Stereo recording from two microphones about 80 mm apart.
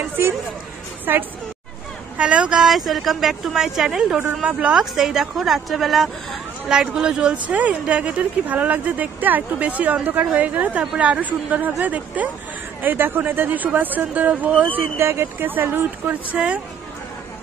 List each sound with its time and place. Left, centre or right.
1.1 s speech: right
2.1 s a woman's voice: centre
2.7 s a woman's voice: centre
14.8 s speech: right